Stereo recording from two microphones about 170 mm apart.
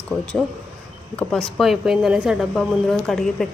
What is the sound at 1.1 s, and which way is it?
Speech, 5° left (ahead or behind).